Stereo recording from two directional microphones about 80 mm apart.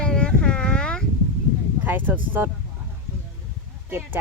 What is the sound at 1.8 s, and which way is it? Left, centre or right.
Speech, right.